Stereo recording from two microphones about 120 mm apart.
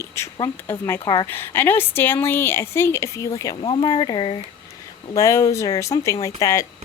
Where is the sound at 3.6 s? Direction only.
45° left (ahead or behind).